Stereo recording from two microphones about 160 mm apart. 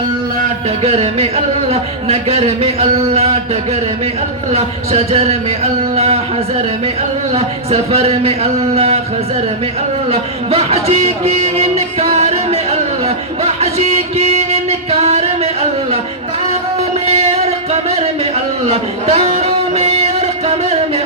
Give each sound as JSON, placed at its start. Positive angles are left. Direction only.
{"t": 0.8, "sound": "speech", "side_deg": -40}
{"t": 7.3, "sound": "speech", "side_deg": -40}
{"t": 10.1, "sound": "speech", "side_deg": -40}
{"t": 11.5, "sound": "music", "side_deg": -40}
{"t": 17.1, "sound": "music", "side_deg": -40}
{"t": 18.7, "sound": "a sound", "side_deg": -40}